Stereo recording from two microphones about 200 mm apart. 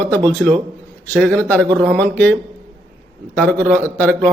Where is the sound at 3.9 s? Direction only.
5° left (ahead or behind).